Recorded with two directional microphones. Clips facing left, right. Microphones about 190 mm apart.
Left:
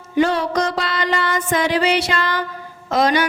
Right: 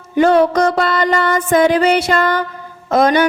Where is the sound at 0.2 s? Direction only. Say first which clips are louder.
Right 6 dB; 55° right (ahead or behind).